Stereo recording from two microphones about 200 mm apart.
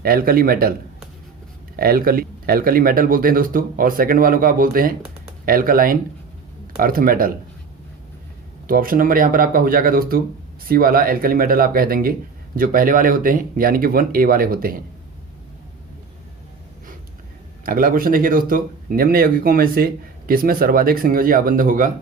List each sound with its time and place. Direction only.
0.0 s speech: 45° right (ahead or behind)
1.7 s speech: 45° right (ahead or behind)
8.6 s speech: 45° right (ahead or behind)
17.7 s speech: 45° right (ahead or behind)